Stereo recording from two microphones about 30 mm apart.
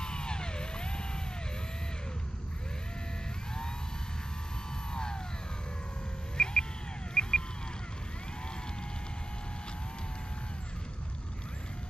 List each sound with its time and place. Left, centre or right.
0.0 s music: left
4.9 s vehicle: left
6.3 s a sound: left